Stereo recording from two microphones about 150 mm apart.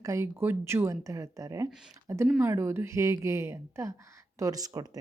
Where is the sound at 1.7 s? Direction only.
5° right (ahead or behind).